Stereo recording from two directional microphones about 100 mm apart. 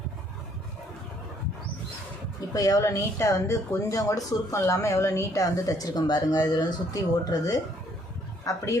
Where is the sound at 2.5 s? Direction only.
35° left (ahead or behind).